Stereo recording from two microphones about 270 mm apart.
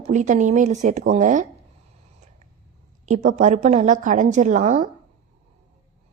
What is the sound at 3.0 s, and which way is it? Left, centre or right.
A woman's voice, right.